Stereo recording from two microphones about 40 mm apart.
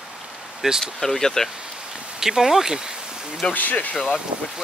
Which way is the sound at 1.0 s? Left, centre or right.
Centre.